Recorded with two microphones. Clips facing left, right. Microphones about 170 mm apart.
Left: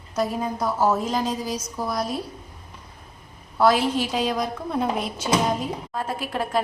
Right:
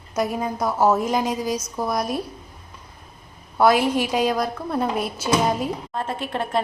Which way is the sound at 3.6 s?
15° right (ahead or behind).